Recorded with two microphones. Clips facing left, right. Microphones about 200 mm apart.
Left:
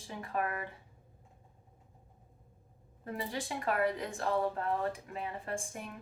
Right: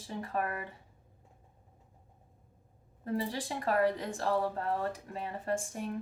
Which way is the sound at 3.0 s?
35° right (ahead or behind).